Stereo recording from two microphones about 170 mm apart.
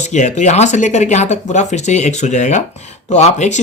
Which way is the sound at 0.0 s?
45° left (ahead or behind).